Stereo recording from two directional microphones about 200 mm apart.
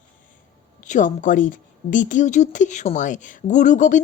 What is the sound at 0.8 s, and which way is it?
Speech, 40° left (ahead or behind).